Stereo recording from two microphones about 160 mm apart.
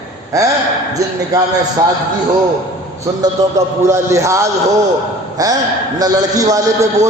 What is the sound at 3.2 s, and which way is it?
A man's voice, 20° right (ahead or behind).